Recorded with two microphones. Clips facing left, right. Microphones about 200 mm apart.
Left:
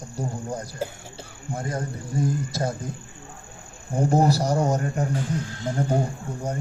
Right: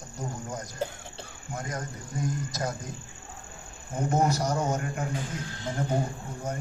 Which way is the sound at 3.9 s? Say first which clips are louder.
Left 5 dB; 30° left (ahead or behind).